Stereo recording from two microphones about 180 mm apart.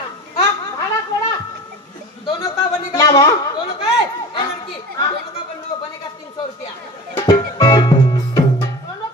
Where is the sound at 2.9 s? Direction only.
20° left (ahead or behind).